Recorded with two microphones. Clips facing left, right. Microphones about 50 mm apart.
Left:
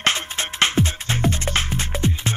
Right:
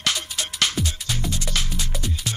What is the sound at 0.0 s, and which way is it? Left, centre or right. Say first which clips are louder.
Music: left 4 dB; left.